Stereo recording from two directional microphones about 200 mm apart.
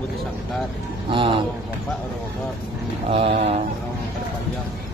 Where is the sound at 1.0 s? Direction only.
25° right (ahead or behind).